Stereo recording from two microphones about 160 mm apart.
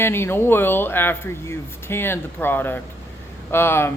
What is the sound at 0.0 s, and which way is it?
Speech, 15° left (ahead or behind).